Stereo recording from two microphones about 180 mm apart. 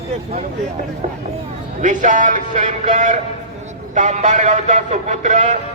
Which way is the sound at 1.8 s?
45° right (ahead or behind).